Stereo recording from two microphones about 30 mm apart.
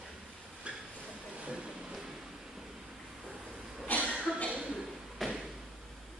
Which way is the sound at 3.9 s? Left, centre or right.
Left.